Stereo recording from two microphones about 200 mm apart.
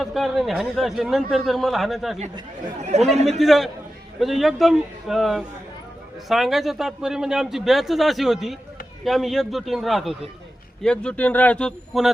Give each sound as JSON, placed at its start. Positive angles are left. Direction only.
{"t": 0.0, "sound": "a man's voice", "side_deg": 0}
{"t": 2.9, "sound": "a man's voice", "side_deg": -35}
{"t": 3.3, "sound": "a man's voice", "side_deg": 0}